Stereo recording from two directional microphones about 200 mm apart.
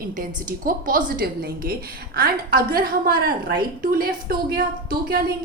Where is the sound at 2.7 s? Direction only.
50° right (ahead or behind).